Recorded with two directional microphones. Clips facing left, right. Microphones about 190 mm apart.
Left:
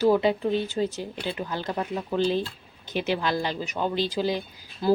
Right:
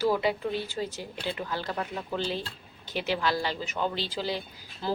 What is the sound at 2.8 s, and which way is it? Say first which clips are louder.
Speech: left 3 dB; 20° left (ahead or behind).